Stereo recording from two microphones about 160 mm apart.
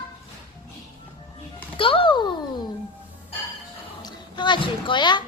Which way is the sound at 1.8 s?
35° left (ahead or behind).